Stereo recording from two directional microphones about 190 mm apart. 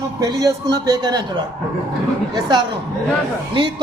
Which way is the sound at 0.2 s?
20° right (ahead or behind).